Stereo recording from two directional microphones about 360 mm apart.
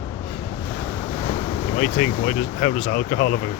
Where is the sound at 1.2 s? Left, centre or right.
Centre.